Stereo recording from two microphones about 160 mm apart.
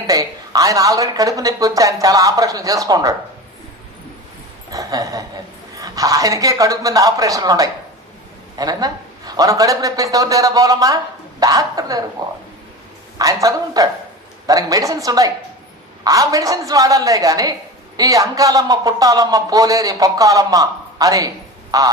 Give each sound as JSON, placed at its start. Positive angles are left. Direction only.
{"t": 0.1, "sound": "a man's voice", "side_deg": -20}
{"t": 4.7, "sound": "a sound", "side_deg": -20}
{"t": 5.8, "sound": "a man's voice", "side_deg": -20}
{"t": 13.1, "sound": "a man's voice", "side_deg": -20}